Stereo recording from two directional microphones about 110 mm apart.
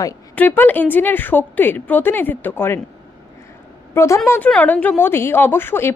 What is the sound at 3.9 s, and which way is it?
Speech, 25° left (ahead or behind).